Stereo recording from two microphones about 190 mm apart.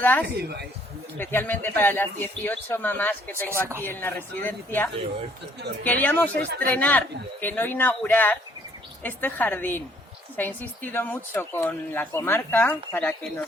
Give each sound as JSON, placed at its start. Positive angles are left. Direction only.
{"t": 0.0, "sound": "speech", "side_deg": 10}
{"t": 0.3, "sound": "a woman's voice", "side_deg": -60}
{"t": 1.2, "sound": "speech", "side_deg": 10}
{"t": 6.3, "sound": "a woman's voice", "side_deg": -60}
{"t": 6.7, "sound": "speech", "side_deg": 10}